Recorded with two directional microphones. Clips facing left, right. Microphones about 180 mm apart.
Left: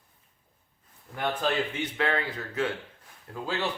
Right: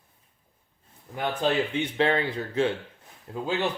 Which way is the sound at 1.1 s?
20° right (ahead or behind).